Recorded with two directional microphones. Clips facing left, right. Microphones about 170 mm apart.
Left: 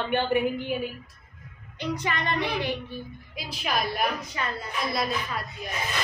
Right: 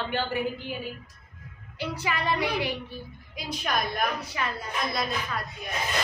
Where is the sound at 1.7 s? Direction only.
5° right (ahead or behind).